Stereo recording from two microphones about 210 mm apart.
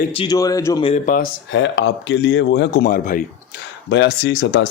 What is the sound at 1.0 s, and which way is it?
Speech, 40° left (ahead or behind).